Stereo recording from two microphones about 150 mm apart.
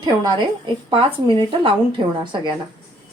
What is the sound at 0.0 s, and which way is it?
Speech, 30° right (ahead or behind).